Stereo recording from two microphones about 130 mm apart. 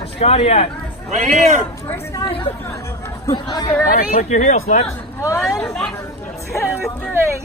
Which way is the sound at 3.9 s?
80° left.